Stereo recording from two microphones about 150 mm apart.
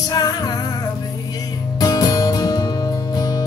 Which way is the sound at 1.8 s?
25° left (ahead or behind).